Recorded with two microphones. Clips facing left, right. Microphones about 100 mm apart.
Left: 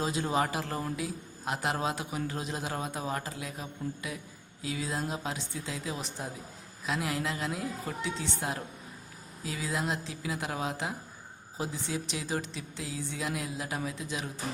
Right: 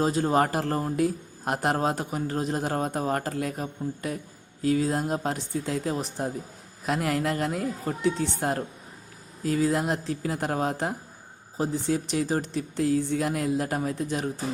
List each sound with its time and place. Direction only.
0.0 s a man's voice: 45° right (ahead or behind)
0.9 s a man's voice: 50° right (ahead or behind)